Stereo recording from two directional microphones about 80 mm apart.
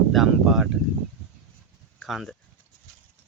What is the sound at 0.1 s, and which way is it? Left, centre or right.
Speech, centre.